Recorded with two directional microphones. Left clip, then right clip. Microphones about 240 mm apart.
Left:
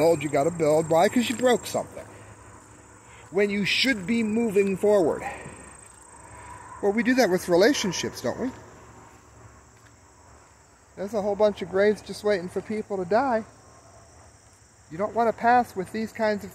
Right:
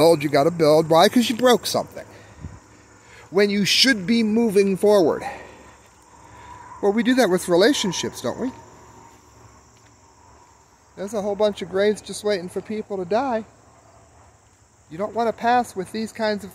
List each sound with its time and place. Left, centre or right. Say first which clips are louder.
0.0 s a man's voice: right 5 dB; right
6.3 s a sound: right 2 dB; right
7.3 s speech: right 3 dB; centre
11.0 s speech: right 1 dB; right
14.9 s speech: right 1 dB; centre